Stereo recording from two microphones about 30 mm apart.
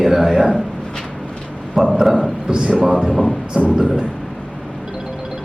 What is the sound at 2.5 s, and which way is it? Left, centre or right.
Speech, right.